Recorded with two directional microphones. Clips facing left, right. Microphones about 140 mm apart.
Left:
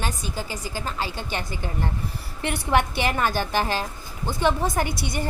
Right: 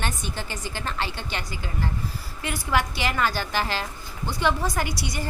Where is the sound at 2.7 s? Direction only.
55° left (ahead or behind).